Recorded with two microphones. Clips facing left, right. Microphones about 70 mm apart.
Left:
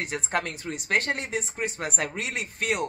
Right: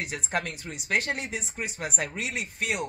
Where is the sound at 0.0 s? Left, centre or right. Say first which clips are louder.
Left 2 dB; left.